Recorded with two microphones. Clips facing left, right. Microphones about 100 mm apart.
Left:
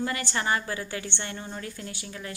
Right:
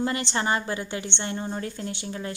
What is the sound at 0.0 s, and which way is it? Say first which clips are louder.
A woman's voice: right 3 dB; 25° right (ahead or behind).